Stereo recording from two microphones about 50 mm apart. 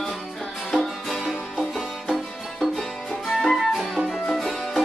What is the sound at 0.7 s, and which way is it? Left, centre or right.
Music, centre.